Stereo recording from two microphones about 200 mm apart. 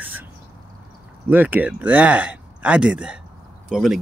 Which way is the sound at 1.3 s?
10° right (ahead or behind).